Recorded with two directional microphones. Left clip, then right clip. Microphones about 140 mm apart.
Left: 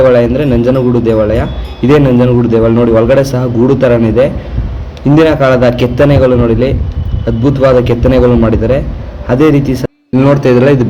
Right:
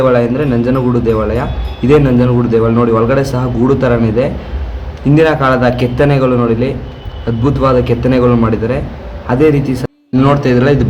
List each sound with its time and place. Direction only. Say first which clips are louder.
0.0 s a man's voice: left 4 dB; 25° left (ahead or behind)